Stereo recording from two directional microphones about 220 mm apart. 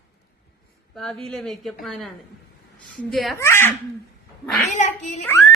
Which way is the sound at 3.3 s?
10° left (ahead or behind).